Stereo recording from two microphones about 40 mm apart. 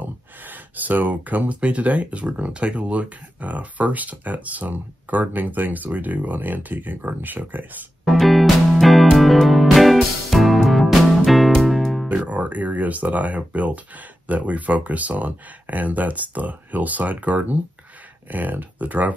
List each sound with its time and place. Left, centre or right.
0.0 s speech: right
8.0 s music: centre
12.1 s speech: right